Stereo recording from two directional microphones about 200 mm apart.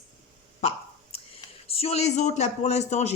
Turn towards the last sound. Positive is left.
turn(degrees=35)  # may be behind; listen again after turning